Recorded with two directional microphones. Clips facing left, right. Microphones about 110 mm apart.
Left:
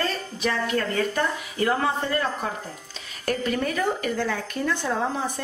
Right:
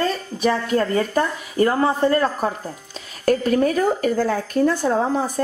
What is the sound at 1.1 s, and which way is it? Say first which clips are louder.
Speech: right 6 dB; 40° right (ahead or behind).